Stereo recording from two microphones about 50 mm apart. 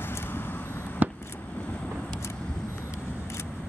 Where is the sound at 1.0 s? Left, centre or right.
Right.